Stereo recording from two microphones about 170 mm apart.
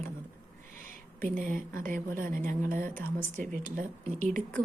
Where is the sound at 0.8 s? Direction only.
50° right (ahead or behind).